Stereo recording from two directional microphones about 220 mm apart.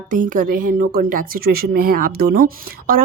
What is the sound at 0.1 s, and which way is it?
Speech, 35° right (ahead or behind).